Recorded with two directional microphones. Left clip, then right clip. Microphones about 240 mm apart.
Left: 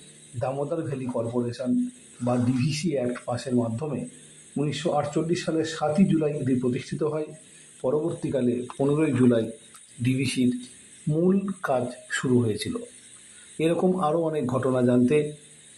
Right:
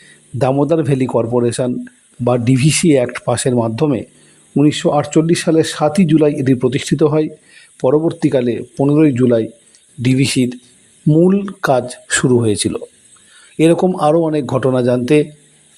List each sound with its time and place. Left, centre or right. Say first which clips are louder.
0.3 s speech: right 14 dB; right